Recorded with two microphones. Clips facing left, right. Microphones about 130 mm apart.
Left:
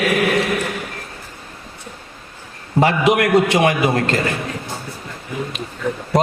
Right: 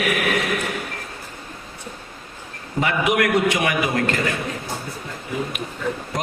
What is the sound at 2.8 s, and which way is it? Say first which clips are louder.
A man's voice: left 5 dB; 30° left (ahead or behind).